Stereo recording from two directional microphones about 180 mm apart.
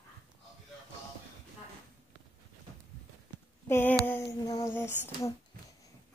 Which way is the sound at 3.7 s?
10° left (ahead or behind).